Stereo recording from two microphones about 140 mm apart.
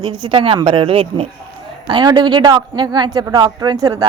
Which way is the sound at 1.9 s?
30° right (ahead or behind).